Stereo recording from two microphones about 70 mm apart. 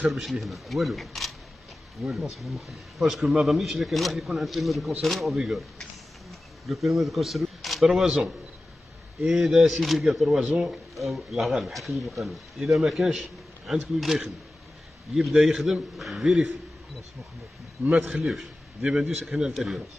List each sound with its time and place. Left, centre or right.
0.1 s speech: centre
10.4 s a man's voice: centre
10.7 s speech: centre
17.9 s a man's voice: centre
18.2 s a man's voice: centre